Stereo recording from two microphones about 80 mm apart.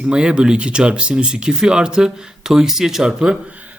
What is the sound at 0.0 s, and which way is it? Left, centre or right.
Speech, centre.